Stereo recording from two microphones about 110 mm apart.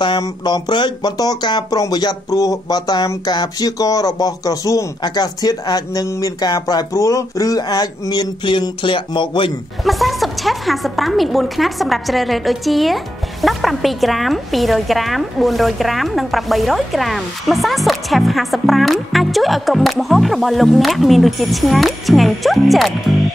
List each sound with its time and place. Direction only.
0.2 s speech: 40° left (ahead or behind)
9.8 s a woman's voice: centre (ahead or behind)